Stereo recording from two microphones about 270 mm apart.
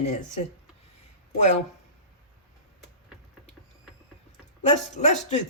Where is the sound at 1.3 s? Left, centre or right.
Left.